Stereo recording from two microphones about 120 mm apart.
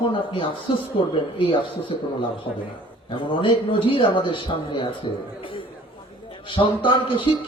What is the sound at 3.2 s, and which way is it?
A man's voice, 45° left (ahead or behind).